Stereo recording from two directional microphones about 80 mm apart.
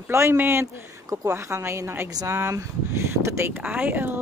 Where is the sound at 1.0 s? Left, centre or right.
Right.